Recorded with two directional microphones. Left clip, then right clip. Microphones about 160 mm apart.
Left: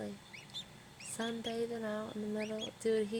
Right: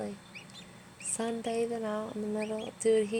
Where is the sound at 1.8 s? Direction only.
5° right (ahead or behind).